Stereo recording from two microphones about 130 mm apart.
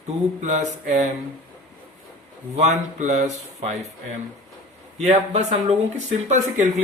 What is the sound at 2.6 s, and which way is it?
Speech, 65° right (ahead or behind).